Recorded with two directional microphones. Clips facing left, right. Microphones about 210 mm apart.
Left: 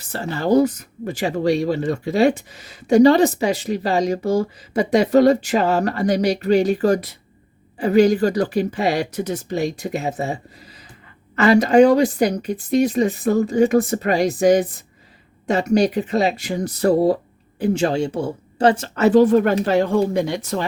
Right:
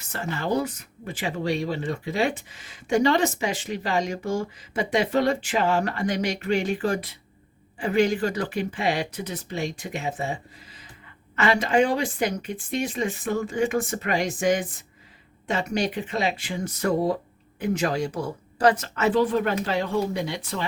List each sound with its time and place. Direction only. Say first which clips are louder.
0.0 s speech: left 6 dB; 35° left (ahead or behind)
11.3 s speech: left 9 dB; 40° left (ahead or behind)